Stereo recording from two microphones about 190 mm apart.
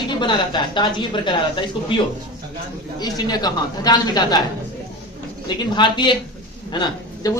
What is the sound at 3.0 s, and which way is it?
A woman's voice, 20° left (ahead or behind).